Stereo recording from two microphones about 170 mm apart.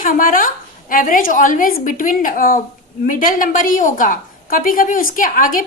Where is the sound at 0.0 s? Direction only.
55° left (ahead or behind).